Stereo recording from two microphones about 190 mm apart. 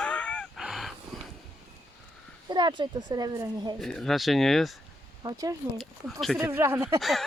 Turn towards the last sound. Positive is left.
turn(degrees=0)  # may be behind; listen again after turning